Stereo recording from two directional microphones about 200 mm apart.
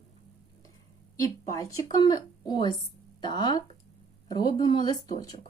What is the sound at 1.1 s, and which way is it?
Speech, 15° left (ahead or behind).